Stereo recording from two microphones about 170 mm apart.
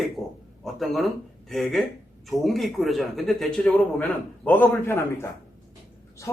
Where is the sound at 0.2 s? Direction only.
15° left (ahead or behind).